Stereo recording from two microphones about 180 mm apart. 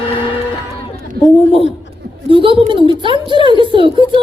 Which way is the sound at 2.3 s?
30° right (ahead or behind).